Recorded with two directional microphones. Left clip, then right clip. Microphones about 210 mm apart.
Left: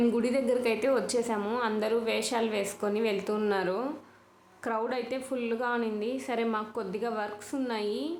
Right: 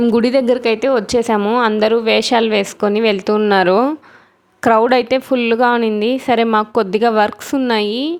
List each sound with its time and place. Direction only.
0.0 s a woman's voice: 40° right (ahead or behind)